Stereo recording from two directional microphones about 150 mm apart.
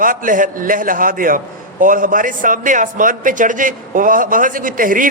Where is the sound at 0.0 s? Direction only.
65° right (ahead or behind).